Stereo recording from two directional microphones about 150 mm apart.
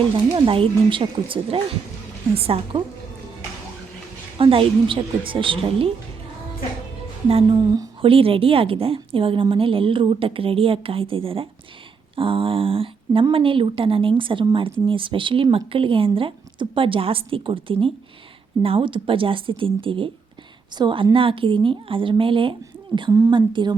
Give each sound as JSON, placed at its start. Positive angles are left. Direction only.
{"t": 0.3, "sound": "speech", "side_deg": -35}
{"t": 4.4, "sound": "speech", "side_deg": -35}
{"t": 7.3, "sound": "speech", "side_deg": -35}
{"t": 8.0, "sound": "speech", "side_deg": -40}